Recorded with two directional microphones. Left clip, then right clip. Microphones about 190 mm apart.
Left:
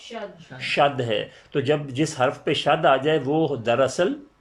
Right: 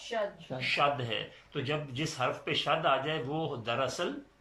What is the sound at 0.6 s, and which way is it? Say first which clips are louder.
Speech: left 8 dB; 40° left (ahead or behind).